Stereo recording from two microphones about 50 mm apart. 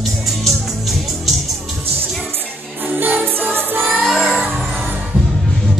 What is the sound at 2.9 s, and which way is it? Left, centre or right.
Music, right.